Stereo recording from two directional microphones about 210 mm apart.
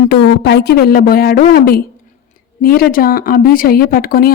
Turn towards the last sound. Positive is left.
turn(degrees=45)  # may be behind; listen again after turning